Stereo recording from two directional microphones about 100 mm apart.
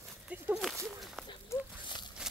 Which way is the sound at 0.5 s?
Centre (ahead or behind).